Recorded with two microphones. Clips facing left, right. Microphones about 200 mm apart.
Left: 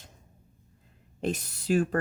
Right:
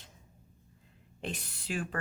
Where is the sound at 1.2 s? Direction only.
40° left (ahead or behind).